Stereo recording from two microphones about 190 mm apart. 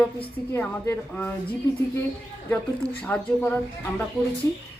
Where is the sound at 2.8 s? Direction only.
5° left (ahead or behind).